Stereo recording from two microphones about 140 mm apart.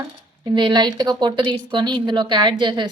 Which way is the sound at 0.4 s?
30° right (ahead or behind).